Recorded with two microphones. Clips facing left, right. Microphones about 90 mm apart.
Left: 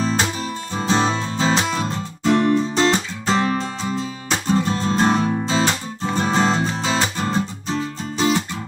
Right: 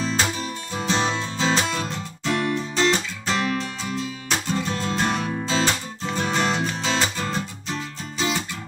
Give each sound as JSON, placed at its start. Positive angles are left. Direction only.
{"t": 0.0, "sound": "music", "side_deg": 35}